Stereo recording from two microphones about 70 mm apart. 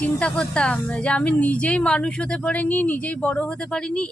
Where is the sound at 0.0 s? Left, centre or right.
Centre.